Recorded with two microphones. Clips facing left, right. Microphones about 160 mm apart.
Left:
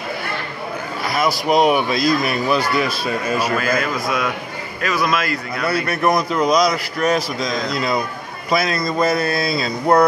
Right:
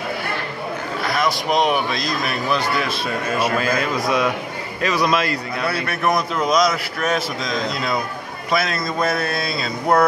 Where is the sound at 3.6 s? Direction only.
30° right (ahead or behind).